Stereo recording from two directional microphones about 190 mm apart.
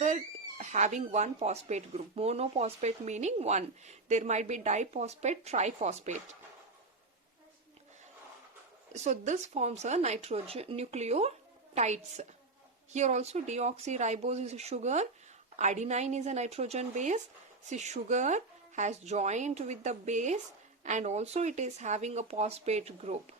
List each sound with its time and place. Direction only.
0.6 s speech: 40° right (ahead or behind)
8.9 s speech: 35° right (ahead or behind)